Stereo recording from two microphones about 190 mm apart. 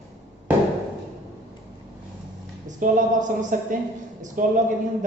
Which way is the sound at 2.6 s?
40° right (ahead or behind).